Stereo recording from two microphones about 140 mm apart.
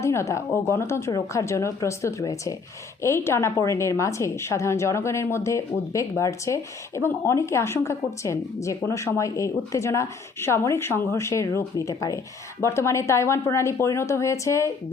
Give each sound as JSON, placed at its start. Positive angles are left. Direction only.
{"t": 0.0, "sound": "a woman's voice", "side_deg": 20}